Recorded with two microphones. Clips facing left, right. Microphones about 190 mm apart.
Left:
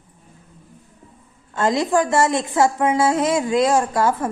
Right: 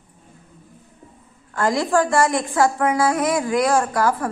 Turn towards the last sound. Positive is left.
turn(degrees=20)  # may be behind; listen again after turning